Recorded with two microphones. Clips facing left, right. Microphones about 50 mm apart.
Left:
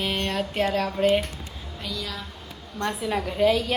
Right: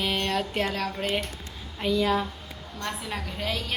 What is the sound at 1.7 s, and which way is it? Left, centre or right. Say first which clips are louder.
Speech: right 10 dB; right.